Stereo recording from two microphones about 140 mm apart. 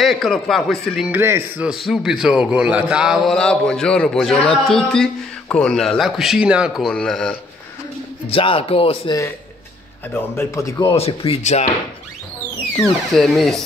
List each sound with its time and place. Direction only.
0.0 s a man's voice: centre (ahead or behind)
1.7 s a man's voice: centre (ahead or behind)
3.3 s a man's voice: 5° left (ahead or behind)
6.8 s a man's voice: 5° left (ahead or behind)
8.3 s speech: 40° left (ahead or behind)
10.1 s a man's voice: 20° left (ahead or behind)
10.9 s speech: 40° left (ahead or behind)
12.8 s a man's voice: centre (ahead or behind)